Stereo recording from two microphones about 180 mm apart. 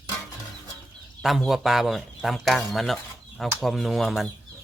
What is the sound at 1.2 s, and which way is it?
Speech, centre (ahead or behind).